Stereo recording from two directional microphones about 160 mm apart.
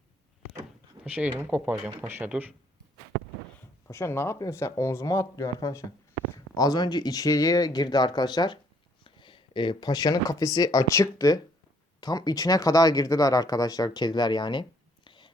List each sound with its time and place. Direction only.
1.1 s speech: 10° right (ahead or behind)
3.8 s speech: 15° left (ahead or behind)